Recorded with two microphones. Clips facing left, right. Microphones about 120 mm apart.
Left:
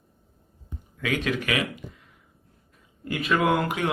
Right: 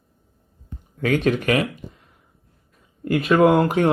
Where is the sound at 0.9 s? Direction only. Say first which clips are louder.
Right 7 dB; 40° right (ahead or behind).